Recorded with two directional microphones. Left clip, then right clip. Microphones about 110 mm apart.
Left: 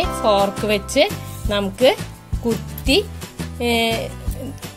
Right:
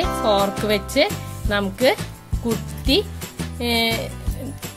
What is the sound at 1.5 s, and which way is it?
Speech, 25° left (ahead or behind).